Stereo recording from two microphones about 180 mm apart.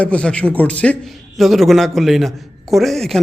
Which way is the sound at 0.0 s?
5° left (ahead or behind).